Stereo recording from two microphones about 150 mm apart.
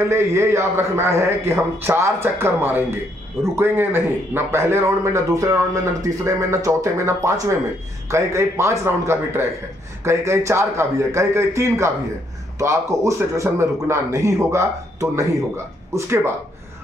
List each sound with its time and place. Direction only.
0.1 s a man's voice: 15° right (ahead or behind)